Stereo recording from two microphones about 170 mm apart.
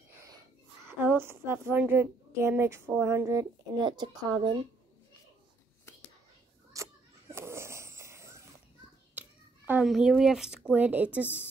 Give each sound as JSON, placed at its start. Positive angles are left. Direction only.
{"t": 0.8, "sound": "a woman's voice", "side_deg": -10}
{"t": 6.7, "sound": "a sound", "side_deg": -15}
{"t": 9.7, "sound": "a woman's voice", "side_deg": -5}